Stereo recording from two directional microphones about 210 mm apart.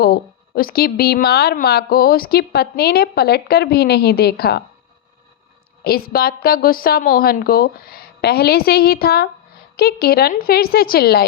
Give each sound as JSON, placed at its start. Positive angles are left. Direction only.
{"t": 0.0, "sound": "a woman's voice", "side_deg": 45}
{"t": 5.8, "sound": "a woman's voice", "side_deg": 45}